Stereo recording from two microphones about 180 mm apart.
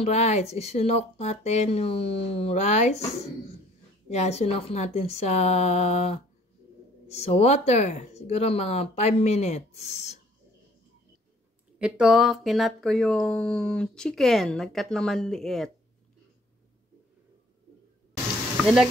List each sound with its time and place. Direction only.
0.0 s speech: 40° left (ahead or behind)
4.1 s speech: 35° left (ahead or behind)
11.8 s speech: 5° right (ahead or behind)
18.6 s stir: centre (ahead or behind)